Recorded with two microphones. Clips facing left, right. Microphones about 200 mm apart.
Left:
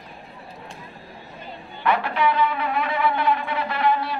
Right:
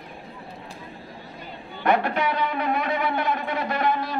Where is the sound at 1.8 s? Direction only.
45° right (ahead or behind).